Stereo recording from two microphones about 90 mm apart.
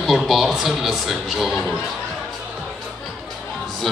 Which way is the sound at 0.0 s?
Centre (ahead or behind).